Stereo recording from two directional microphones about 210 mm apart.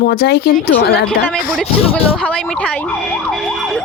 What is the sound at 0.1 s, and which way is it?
Speech, 50° left (ahead or behind).